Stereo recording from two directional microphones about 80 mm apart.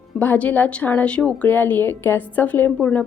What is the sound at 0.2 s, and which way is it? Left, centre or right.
A woman's voice, left.